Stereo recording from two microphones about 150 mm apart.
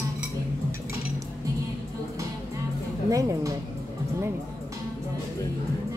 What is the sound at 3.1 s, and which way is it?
Speech, 20° right (ahead or behind).